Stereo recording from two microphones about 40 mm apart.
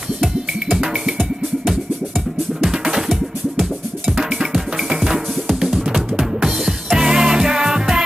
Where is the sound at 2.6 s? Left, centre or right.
Centre.